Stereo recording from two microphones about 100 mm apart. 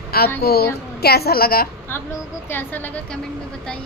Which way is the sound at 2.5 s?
20° left (ahead or behind).